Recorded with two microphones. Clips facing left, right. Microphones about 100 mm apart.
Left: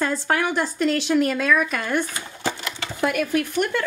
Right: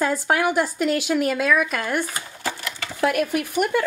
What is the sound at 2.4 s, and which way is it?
Sewing machine, 25° left (ahead or behind).